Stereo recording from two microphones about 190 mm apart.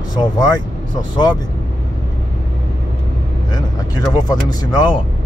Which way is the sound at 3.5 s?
20° left (ahead or behind).